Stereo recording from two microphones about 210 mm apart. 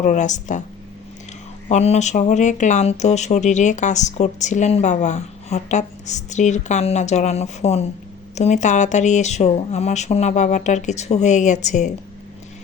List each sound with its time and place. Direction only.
0.0 s speech: 35° left (ahead or behind)
1.7 s speech: 30° left (ahead or behind)